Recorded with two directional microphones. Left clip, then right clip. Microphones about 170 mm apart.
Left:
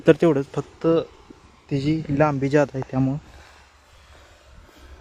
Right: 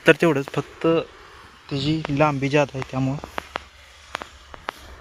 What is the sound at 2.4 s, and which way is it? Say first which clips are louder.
Speech: left 1 dB; 45° left (ahead or behind).